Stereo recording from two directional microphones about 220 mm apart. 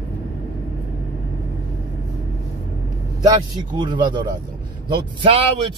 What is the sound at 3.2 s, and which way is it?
Speech, 20° right (ahead or behind).